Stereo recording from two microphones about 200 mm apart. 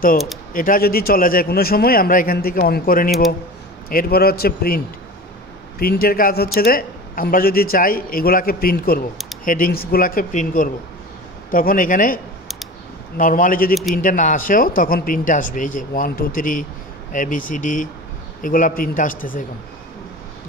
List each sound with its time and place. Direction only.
0.5 s a man's voice: 45° left (ahead or behind)
13.2 s a man's voice: 45° left (ahead or behind)